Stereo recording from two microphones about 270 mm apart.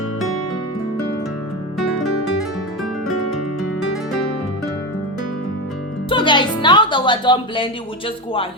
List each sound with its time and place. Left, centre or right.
6.1 s a woman's voice: centre